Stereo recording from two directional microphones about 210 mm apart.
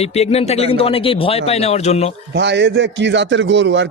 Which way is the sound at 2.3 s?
55° right (ahead or behind).